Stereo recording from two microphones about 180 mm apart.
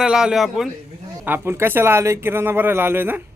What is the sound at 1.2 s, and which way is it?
Speech, 10° right (ahead or behind).